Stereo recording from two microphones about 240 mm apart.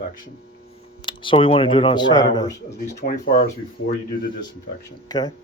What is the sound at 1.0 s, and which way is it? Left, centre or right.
Speech, centre.